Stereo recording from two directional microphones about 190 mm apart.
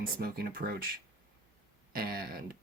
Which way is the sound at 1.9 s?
50° right (ahead or behind).